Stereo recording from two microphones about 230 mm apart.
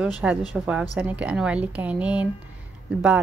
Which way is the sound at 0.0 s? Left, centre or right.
Centre.